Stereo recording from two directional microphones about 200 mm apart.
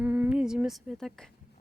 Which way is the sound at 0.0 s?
5° right (ahead or behind).